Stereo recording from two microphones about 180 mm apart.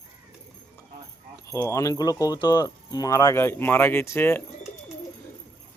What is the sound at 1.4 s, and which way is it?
Speech, 15° left (ahead or behind).